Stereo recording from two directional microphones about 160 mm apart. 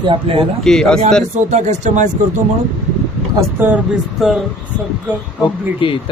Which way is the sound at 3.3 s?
10° right (ahead or behind).